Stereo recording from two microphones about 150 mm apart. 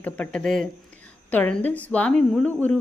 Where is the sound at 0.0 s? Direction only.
5° left (ahead or behind).